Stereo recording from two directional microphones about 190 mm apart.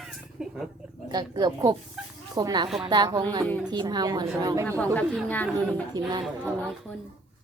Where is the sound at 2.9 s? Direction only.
20° right (ahead or behind).